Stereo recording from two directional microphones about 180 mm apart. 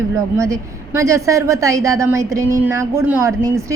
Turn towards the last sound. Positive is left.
turn(degrees=-15)  # may be behind; listen again after turning